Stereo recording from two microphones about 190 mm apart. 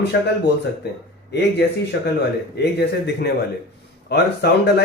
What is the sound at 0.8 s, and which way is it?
Speech, 60° left (ahead or behind).